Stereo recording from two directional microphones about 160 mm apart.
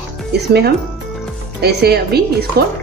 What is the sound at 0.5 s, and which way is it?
Speech, 80° right.